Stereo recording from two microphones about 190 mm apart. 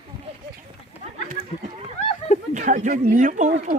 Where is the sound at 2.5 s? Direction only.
40° right (ahead or behind).